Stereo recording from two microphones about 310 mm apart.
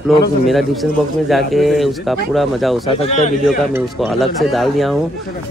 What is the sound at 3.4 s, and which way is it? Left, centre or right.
Speech, centre.